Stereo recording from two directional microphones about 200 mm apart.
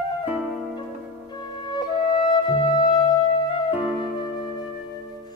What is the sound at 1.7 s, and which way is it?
Music, 20° left (ahead or behind).